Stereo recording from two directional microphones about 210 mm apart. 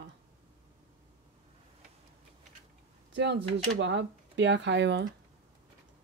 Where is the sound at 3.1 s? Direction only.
55° right (ahead or behind).